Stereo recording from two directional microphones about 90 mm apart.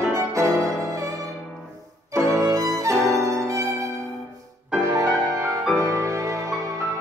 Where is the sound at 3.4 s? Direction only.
35° right (ahead or behind).